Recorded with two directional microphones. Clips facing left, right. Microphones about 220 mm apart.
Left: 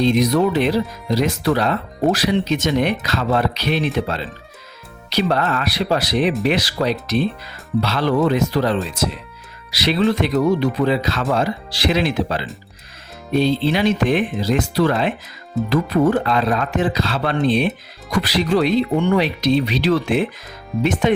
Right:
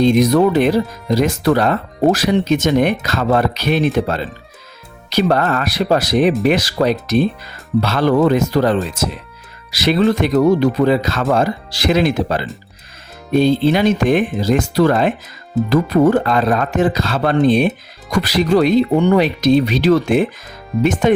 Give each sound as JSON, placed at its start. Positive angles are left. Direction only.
{"t": 0.0, "sound": "speech", "side_deg": -50}